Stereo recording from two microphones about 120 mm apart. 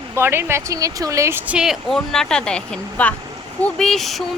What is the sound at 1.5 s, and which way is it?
Speech, 5° right (ahead or behind).